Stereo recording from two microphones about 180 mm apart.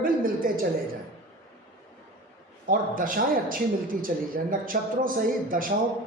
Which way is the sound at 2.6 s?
50° right (ahead or behind).